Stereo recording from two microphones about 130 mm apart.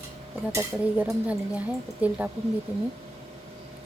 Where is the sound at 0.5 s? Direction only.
15° right (ahead or behind).